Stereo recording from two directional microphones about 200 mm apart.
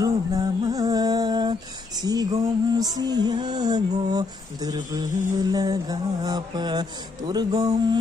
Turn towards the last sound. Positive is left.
turn(degrees=-20)  # may be behind; listen again after turning